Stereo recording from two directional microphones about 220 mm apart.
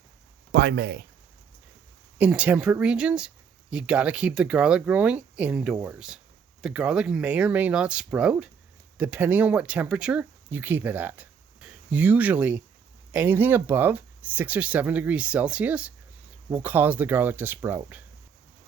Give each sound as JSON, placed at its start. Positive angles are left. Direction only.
{"t": 0.5, "sound": "speech", "side_deg": -50}
{"t": 2.1, "sound": "speech", "side_deg": -5}